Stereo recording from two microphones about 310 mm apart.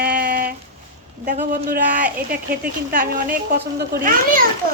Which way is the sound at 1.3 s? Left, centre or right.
Right.